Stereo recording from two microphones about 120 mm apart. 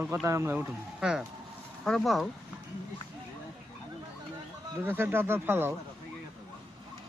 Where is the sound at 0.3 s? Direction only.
20° right (ahead or behind).